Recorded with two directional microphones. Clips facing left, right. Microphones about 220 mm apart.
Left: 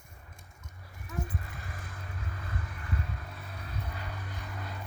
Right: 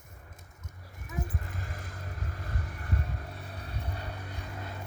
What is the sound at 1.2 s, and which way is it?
Vehicle, 45° right (ahead or behind).